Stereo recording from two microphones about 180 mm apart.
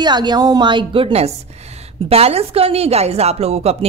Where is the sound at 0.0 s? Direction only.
25° right (ahead or behind).